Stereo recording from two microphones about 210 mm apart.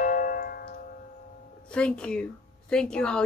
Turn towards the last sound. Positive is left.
turn(degrees=5)  # may be behind; listen again after turning